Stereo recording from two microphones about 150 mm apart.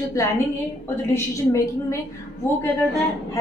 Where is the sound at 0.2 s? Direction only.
20° left (ahead or behind).